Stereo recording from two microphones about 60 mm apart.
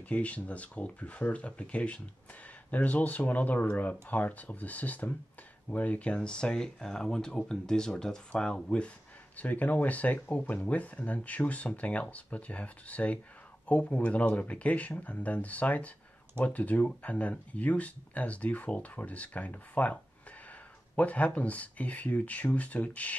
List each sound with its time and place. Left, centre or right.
0.1 s speech: left